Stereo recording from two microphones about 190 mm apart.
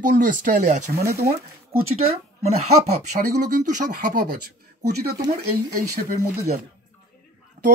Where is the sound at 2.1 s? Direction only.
35° right (ahead or behind).